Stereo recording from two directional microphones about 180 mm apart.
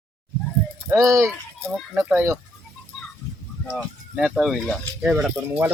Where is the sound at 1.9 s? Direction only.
10° right (ahead or behind).